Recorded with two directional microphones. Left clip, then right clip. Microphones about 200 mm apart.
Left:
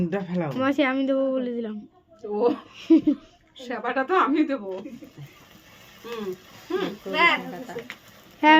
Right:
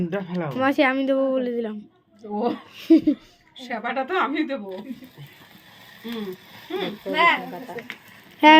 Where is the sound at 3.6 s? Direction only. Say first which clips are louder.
Even; 15° left (ahead or behind).